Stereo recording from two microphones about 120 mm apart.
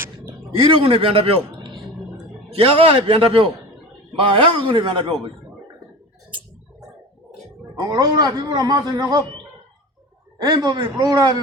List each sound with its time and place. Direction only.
0.6 s a man's voice: 45° right (ahead or behind)
1.5 s vehicle: 40° right (ahead or behind)
2.5 s a man's voice: 55° right (ahead or behind)
4.6 s a man's voice: 40° right (ahead or behind)
7.8 s a man's voice: 30° right (ahead or behind)